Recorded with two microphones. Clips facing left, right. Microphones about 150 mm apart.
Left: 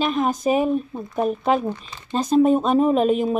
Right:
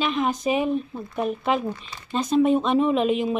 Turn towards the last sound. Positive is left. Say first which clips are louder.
# left 3 dB
turn(degrees=45)  # may be behind; listen again after turning